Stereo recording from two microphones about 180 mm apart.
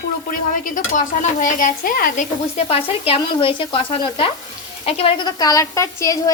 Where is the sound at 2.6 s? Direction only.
35° left (ahead or behind).